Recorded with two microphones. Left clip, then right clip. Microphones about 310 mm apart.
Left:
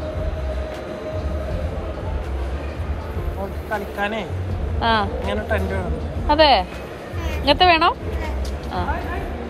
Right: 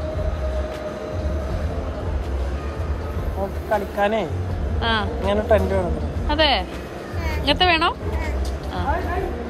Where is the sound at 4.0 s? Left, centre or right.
Right.